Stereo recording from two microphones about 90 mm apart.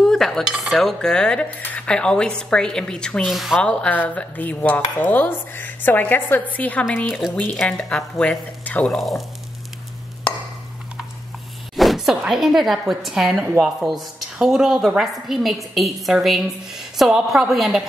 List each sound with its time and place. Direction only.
0.0 s cutlery: 5° left (ahead or behind)
0.4 s a woman's voice: 5° right (ahead or behind)
3.3 s a woman's voice: centre (ahead or behind)
3.6 s speech: 15° left (ahead or behind)
7.1 s a woman's voice: 5° right (ahead or behind)
7.3 s speech: 15° left (ahead or behind)
11.7 s zipper: centre (ahead or behind)
12.3 s a woman's voice: 5° right (ahead or behind)